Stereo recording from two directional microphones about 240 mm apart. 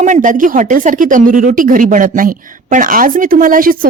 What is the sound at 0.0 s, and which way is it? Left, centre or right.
Speech, right.